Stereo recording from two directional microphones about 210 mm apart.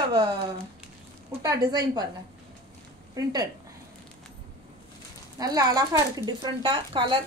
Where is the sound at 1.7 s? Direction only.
20° right (ahead or behind).